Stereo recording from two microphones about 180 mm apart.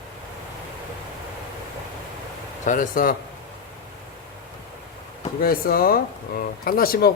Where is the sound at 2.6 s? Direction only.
50° left (ahead or behind).